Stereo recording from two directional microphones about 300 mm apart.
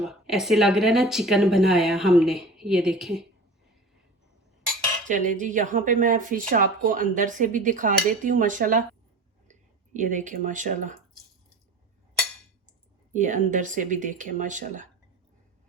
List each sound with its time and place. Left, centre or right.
0.0 s speech: centre
5.0 s speech: right
13.1 s speech: right